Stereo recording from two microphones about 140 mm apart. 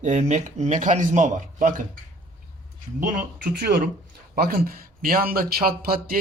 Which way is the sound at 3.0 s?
90° right.